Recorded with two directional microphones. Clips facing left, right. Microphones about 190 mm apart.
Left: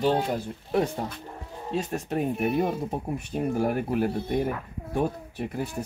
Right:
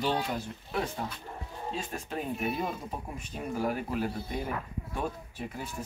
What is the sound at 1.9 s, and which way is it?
Speech, 55° left (ahead or behind).